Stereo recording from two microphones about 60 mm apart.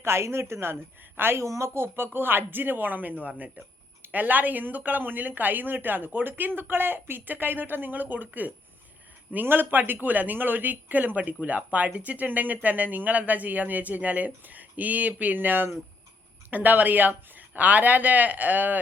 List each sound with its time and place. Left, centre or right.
0.0 s a woman's voice: right
1.4 s speech: right